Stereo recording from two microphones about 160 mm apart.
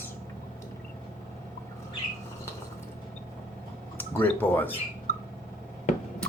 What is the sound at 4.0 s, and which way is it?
Speech, 10° left (ahead or behind).